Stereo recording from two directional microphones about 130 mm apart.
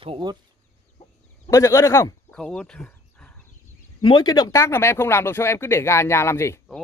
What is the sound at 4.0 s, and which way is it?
Speech, 35° left (ahead or behind).